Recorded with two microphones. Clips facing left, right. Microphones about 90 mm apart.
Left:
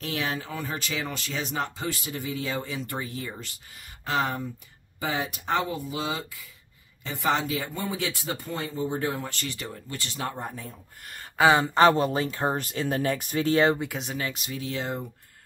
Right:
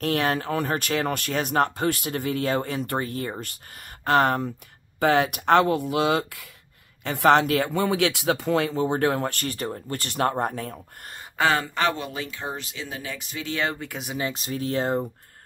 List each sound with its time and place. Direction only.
0.0 s speech: 55° right (ahead or behind); by 10.8 s 75° right (ahead or behind)
11.5 s speech: 25° left (ahead or behind)
11.9 s speech: 35° left (ahead or behind)
13.8 s speech: 5° right (ahead or behind)
14.3 s speech: 40° right (ahead or behind)